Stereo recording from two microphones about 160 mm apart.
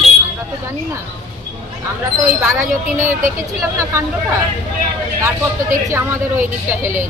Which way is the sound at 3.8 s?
15° right (ahead or behind).